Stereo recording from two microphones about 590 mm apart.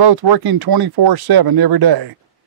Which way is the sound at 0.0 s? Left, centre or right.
Right.